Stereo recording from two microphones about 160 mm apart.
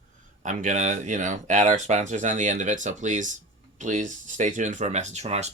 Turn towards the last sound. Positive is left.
turn(degrees=-45)  # may be behind; listen again after turning